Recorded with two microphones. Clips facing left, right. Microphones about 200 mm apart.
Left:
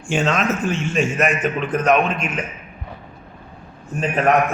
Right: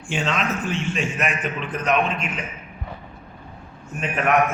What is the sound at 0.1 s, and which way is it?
A man's voice, 45° left (ahead or behind).